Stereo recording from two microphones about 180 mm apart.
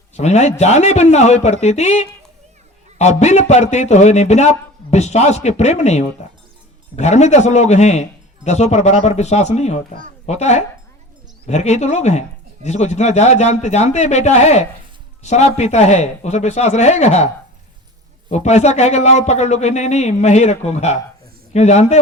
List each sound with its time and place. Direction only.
0.2 s a man's voice: 40° left (ahead or behind)
18.3 s a man's voice: 40° left (ahead or behind)